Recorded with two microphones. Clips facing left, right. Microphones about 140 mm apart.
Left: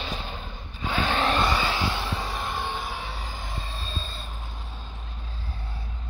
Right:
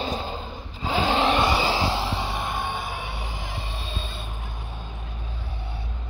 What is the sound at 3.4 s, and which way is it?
Vehicle, 70° right (ahead or behind).